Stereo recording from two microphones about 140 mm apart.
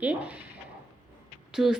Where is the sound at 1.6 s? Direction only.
5° right (ahead or behind).